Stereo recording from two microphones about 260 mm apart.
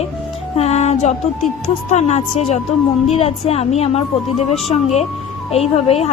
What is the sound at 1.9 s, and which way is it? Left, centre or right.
A woman's voice, left.